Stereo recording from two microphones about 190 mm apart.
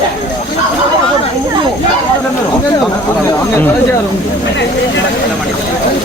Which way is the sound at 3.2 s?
15° left (ahead or behind).